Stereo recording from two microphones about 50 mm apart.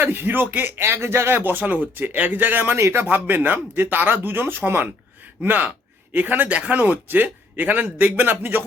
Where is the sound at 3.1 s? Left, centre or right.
Right.